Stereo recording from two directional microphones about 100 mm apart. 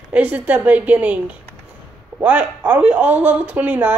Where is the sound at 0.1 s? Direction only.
15° right (ahead or behind).